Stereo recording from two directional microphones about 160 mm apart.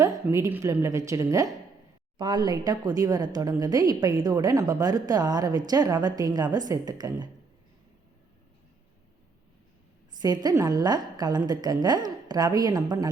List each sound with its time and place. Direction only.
0.3 s speech: 15° right (ahead or behind)
10.2 s speech: 25° right (ahead or behind)